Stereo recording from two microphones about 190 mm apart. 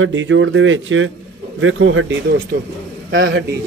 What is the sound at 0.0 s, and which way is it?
A man's voice, 80° right.